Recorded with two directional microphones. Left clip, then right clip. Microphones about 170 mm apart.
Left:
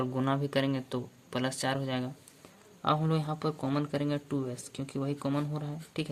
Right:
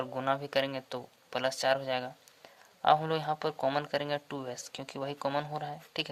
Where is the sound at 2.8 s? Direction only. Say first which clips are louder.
Right 4 dB; 55° right (ahead or behind).